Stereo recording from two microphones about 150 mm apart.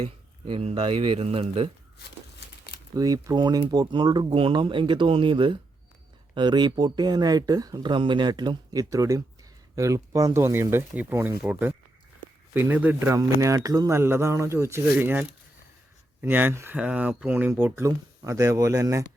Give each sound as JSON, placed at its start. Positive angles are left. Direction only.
{"t": 0.0, "sound": "speech", "side_deg": -35}
{"t": 2.9, "sound": "speech", "side_deg": -25}